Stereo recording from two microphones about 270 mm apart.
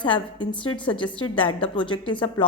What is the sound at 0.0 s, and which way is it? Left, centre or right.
A woman's voice, centre.